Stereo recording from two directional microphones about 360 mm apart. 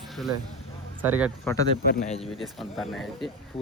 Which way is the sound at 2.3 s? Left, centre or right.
Centre.